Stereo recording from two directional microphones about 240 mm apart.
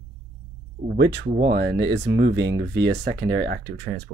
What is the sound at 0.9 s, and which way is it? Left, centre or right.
Speech, right.